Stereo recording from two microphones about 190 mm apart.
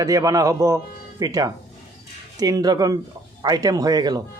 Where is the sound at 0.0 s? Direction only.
20° right (ahead or behind).